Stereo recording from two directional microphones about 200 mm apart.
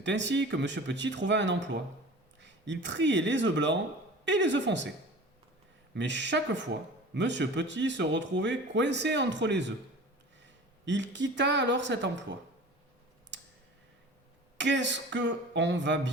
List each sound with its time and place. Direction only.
0.0 s speech: 65° right (ahead or behind)
5.9 s speech: 65° right (ahead or behind)
10.8 s speech: 65° right (ahead or behind)
14.6 s speech: 65° right (ahead or behind)